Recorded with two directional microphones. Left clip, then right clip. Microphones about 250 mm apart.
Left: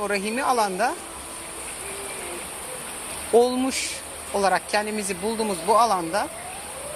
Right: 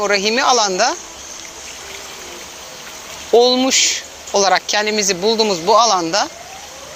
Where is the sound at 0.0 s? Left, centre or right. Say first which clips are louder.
Right 10 dB; right.